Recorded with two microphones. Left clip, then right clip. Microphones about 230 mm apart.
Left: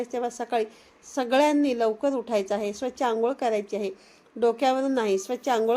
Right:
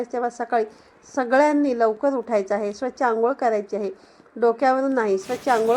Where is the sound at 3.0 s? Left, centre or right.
Centre.